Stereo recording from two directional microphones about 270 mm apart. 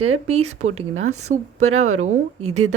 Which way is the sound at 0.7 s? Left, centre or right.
Right.